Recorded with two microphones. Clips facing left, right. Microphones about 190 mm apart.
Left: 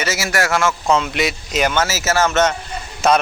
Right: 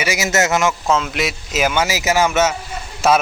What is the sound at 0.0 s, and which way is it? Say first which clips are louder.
Speech: right 2 dB; 15° right (ahead or behind).